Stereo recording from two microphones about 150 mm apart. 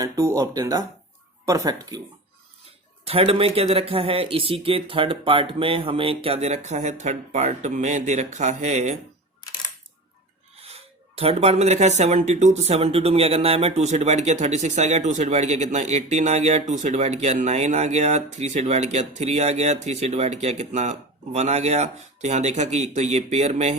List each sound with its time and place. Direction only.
0.0 s speech: 20° right (ahead or behind)
3.1 s speech: 40° right (ahead or behind)
10.6 s speech: 40° right (ahead or behind)